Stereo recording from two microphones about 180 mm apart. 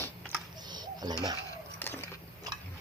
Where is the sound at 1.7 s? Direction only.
10° left (ahead or behind).